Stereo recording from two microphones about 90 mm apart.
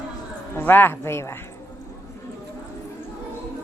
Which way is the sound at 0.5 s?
20° left (ahead or behind).